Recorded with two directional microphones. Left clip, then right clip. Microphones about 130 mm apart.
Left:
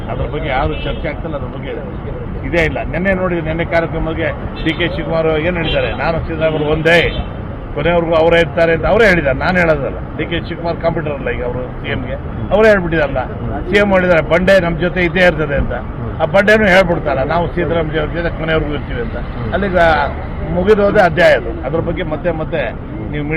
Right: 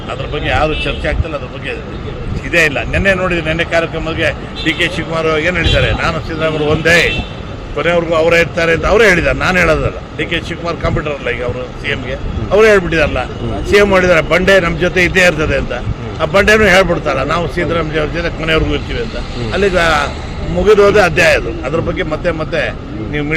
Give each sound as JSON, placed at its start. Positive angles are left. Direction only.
{"t": 0.4, "sound": "speech", "side_deg": -45}
{"t": 2.5, "sound": "speech", "side_deg": -50}
{"t": 12.5, "sound": "a man's voice", "side_deg": -55}